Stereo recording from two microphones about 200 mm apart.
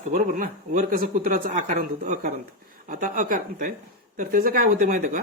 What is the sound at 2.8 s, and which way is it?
A woman's voice, 40° right (ahead or behind).